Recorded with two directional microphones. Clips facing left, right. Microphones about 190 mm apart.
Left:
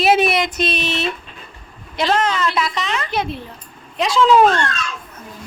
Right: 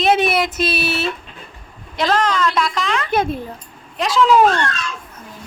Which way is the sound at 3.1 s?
50° right (ahead or behind).